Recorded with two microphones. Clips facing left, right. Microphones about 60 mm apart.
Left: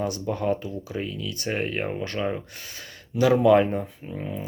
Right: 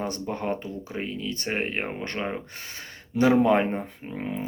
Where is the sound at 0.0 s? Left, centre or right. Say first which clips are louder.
Left 3 dB; right.